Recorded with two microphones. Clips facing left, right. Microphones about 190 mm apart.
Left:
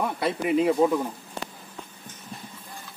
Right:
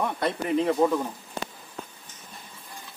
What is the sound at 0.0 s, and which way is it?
Speech, 5° left (ahead or behind).